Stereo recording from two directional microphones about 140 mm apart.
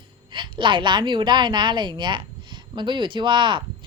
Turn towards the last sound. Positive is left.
turn(degrees=-35)  # may be behind; listen again after turning